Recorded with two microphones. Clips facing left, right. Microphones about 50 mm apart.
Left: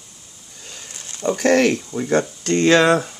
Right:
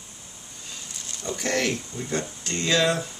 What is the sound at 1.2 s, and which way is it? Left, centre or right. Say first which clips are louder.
Speech: left 11 dB; left.